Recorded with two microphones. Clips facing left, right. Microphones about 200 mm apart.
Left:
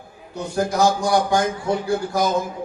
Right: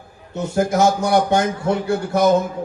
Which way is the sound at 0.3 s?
25° right (ahead or behind).